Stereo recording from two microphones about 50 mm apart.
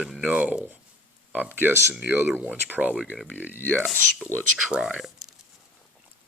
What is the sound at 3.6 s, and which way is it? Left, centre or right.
Speech, right.